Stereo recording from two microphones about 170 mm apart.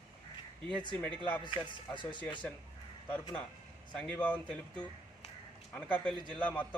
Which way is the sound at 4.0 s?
10° left (ahead or behind).